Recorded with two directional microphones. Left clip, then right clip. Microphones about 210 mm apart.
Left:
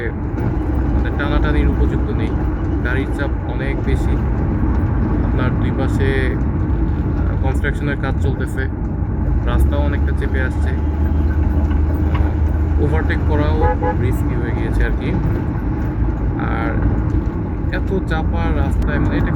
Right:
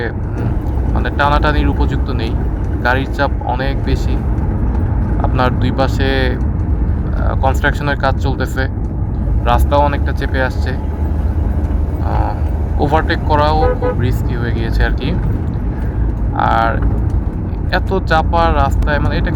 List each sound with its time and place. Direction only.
1.2 s speech: 30° right (ahead or behind)
2.8 s speech: 30° right (ahead or behind)
5.4 s speech: 30° right (ahead or behind)
7.4 s speech: 30° right (ahead or behind)
12.9 s speech: 30° right (ahead or behind)
16.4 s speech: 30° right (ahead or behind)